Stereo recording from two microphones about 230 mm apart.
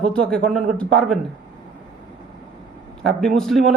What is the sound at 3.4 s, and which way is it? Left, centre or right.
Speech, centre.